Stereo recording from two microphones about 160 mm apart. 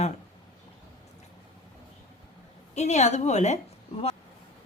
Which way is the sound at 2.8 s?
45° left (ahead or behind).